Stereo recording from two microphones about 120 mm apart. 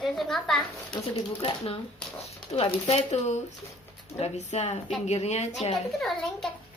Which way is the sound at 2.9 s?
70° left (ahead or behind).